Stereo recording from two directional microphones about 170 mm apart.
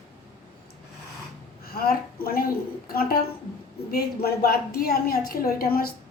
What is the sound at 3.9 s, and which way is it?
A woman's voice, 65° left (ahead or behind).